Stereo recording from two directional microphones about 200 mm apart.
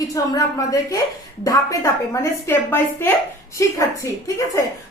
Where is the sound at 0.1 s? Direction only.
15° left (ahead or behind).